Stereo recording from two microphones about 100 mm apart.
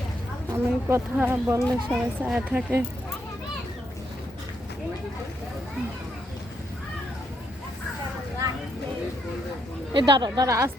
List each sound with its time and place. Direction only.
0.5 s speech: 25° right (ahead or behind)
1.9 s speech: 10° right (ahead or behind)
9.9 s a woman's voice: 50° right (ahead or behind); by 10.7 s 35° right (ahead or behind)